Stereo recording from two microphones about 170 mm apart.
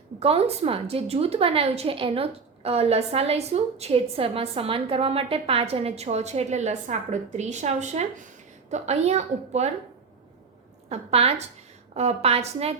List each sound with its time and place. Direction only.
0.2 s a woman's voice: 35° right (ahead or behind)
10.8 s a woman's voice: 35° right (ahead or behind)